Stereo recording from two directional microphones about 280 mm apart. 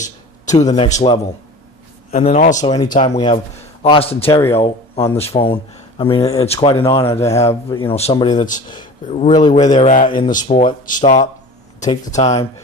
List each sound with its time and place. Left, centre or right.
0.7 s speech: left
2.6 s speech: centre
4.3 s speech: centre
4.6 s a man's voice: centre